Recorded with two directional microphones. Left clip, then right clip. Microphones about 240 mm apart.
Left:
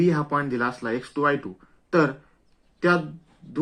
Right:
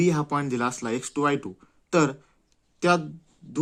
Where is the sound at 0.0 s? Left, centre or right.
Right.